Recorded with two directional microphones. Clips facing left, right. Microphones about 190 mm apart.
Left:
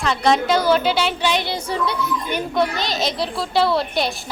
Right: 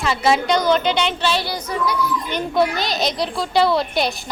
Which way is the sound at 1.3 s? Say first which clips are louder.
Left 1 dB; 20° left (ahead or behind).